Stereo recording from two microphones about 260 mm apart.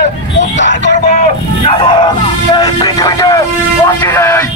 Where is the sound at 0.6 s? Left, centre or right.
Left.